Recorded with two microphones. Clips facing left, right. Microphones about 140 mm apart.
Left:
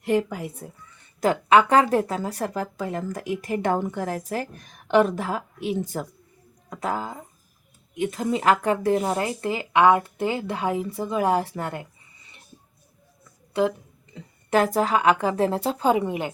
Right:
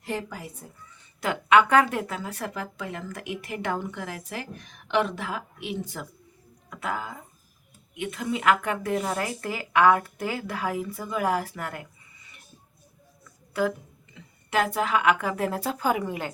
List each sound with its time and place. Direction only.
0.0 s speech: 60° left (ahead or behind)
1.2 s a woman's voice: 35° left (ahead or behind)
13.5 s a sound: 25° left (ahead or behind)
14.5 s a woman's voice: 40° left (ahead or behind); by 16.3 s 20° left (ahead or behind)